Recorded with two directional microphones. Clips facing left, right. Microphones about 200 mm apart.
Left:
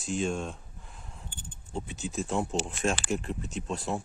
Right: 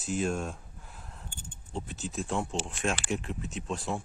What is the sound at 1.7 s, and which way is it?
Speech, centre (ahead or behind).